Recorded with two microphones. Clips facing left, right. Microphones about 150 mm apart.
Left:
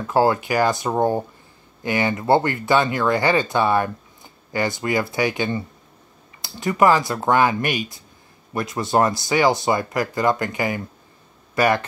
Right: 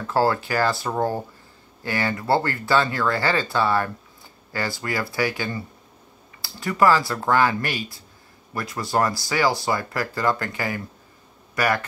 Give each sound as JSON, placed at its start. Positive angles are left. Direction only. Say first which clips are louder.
{"t": 0.0, "sound": "speech", "louder": "left 3 dB", "side_deg": 15}